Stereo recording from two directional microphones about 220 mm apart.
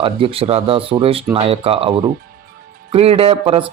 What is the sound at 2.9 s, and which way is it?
Speech, 25° right (ahead or behind).